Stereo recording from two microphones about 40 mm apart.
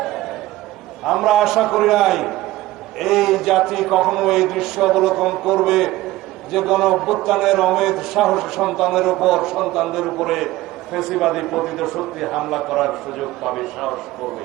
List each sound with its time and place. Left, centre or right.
0.0 s chatter: centre
1.0 s a man's voice: centre